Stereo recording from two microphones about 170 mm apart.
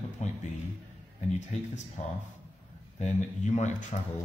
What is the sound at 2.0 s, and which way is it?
Speech, 40° left (ahead or behind).